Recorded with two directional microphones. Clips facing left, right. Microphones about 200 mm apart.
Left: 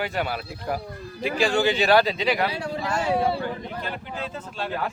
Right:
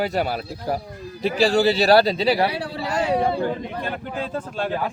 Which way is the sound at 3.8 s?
50° right (ahead or behind).